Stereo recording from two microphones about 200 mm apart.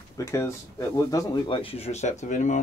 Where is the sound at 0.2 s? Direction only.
15° left (ahead or behind).